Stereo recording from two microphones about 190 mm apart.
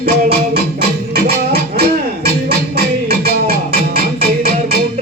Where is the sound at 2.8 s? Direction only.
55° right (ahead or behind).